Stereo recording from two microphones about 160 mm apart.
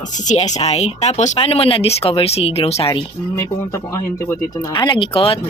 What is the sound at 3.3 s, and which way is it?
Speech, 15° left (ahead or behind).